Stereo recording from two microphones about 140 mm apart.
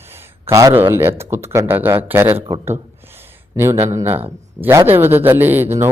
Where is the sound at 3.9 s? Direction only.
15° right (ahead or behind).